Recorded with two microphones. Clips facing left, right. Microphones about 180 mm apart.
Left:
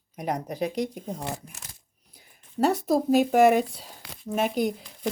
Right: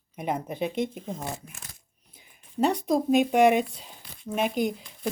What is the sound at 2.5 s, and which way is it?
A woman's voice, centre (ahead or behind).